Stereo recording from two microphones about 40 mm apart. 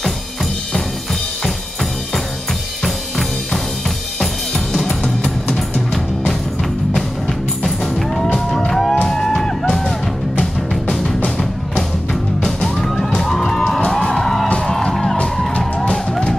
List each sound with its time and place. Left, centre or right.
5.0 s music: centre
7.6 s music: centre
12.4 s music: centre
15.5 s music: left